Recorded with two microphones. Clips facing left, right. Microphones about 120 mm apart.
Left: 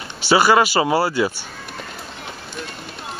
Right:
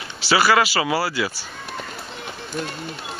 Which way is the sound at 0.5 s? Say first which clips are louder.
Left 3 dB; 25° left (ahead or behind).